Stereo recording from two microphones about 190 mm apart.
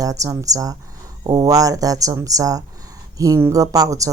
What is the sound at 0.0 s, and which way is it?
A woman's voice, 20° right (ahead or behind).